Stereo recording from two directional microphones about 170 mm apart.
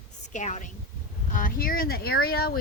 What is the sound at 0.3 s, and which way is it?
Speech, 45° left (ahead or behind).